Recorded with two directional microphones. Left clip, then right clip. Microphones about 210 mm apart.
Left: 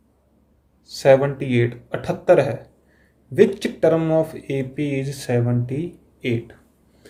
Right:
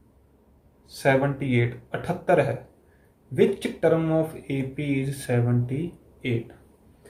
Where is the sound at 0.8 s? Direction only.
45° left (ahead or behind).